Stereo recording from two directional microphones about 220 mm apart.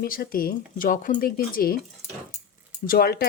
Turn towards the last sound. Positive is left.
turn(degrees=45)  # may be behind; listen again after turning